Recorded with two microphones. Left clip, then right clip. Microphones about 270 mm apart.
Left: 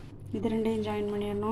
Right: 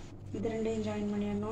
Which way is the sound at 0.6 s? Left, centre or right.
Left.